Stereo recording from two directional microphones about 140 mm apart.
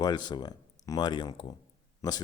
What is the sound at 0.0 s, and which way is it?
Speech, 30° left (ahead or behind).